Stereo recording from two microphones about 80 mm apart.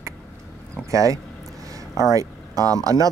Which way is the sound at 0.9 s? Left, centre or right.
Right.